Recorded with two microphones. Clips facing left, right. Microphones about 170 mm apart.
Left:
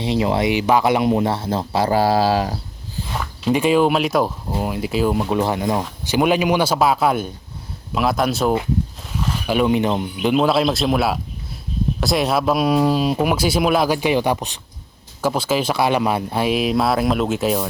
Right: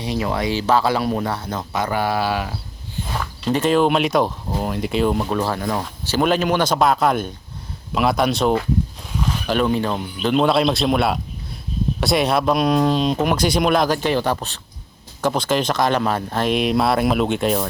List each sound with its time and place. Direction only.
0.0 s speech: 20° left (ahead or behind)
3.2 s speech: 5° left (ahead or behind)
5.3 s speech: 15° left (ahead or behind)
10.3 s speech: centre (ahead or behind)